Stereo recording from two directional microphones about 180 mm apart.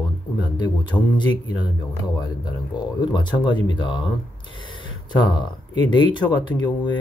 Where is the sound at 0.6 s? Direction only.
25° left (ahead or behind).